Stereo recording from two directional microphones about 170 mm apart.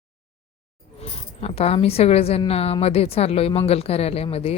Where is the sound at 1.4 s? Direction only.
35° left (ahead or behind).